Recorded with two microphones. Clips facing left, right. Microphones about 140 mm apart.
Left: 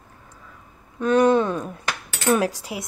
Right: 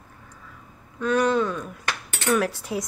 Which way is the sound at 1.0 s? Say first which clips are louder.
Left 4 dB; 20° left (ahead or behind).